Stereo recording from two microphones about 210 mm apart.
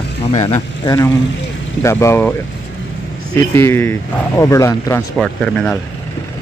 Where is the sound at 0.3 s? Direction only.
30° left (ahead or behind); by 2.3 s 10° left (ahead or behind).